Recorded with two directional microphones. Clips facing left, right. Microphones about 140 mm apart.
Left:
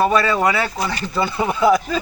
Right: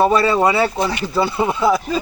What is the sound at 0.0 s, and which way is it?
Speech, 30° right (ahead or behind).